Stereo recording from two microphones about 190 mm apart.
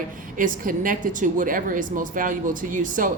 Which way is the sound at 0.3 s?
45° right (ahead or behind).